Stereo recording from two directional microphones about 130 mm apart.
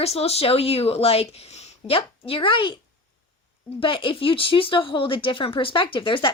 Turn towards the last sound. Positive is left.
turn(degrees=40)  # may be behind; listen again after turning